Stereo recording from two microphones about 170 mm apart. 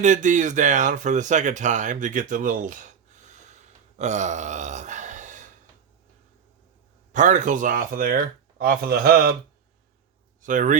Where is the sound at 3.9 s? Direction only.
45° right (ahead or behind).